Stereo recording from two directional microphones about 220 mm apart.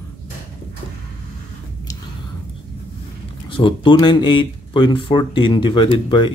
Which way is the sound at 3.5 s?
20° left (ahead or behind).